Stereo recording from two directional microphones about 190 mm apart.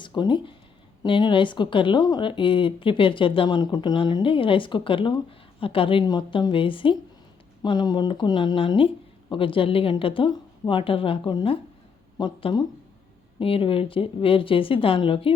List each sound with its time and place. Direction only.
0.0 s speech: 25° left (ahead or behind)